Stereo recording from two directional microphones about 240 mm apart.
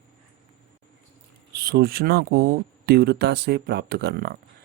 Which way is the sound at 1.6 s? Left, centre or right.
Right.